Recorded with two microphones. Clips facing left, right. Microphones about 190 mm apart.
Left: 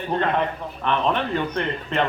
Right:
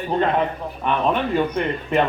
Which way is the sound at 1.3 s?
10° right (ahead or behind).